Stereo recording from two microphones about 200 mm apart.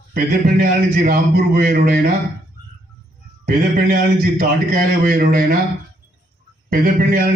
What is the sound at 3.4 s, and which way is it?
A man's voice, 45° right (ahead or behind).